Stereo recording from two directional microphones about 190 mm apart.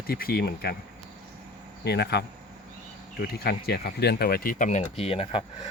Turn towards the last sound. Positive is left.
turn(degrees=30)  # may be behind; listen again after turning